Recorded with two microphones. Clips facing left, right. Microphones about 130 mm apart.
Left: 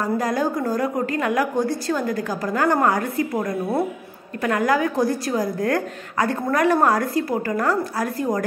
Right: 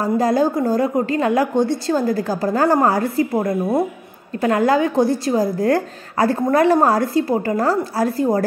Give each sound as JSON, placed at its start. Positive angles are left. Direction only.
{"t": 0.0, "sound": "a woman's voice", "side_deg": -30}